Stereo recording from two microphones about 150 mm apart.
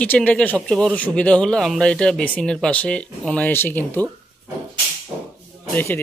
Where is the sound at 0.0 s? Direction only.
10° left (ahead or behind).